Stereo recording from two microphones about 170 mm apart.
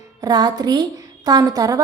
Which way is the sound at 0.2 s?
25° right (ahead or behind).